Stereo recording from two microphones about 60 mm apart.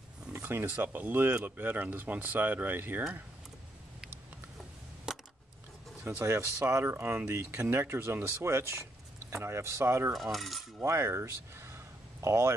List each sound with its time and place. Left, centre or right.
0.3 s speech: right
5.1 s a sound: centre
6.0 s speech: right
6.9 s speech: right
7.2 s speech: right
10.1 s cutlery: centre
10.8 s speech: right